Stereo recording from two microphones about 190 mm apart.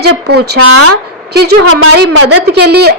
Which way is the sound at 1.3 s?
75° right (ahead or behind).